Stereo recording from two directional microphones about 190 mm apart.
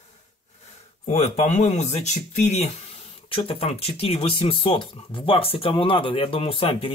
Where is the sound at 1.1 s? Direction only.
35° left (ahead or behind).